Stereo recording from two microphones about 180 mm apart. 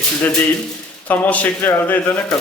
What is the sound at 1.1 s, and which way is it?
Speech, 10° left (ahead or behind).